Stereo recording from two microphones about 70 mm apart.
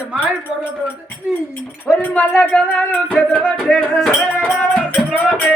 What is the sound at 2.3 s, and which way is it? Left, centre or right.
Music, left.